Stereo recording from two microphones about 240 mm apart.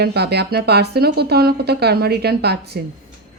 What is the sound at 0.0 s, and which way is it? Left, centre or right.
A woman's voice, right.